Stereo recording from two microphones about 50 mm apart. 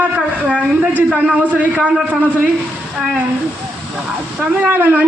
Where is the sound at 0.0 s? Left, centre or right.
Right.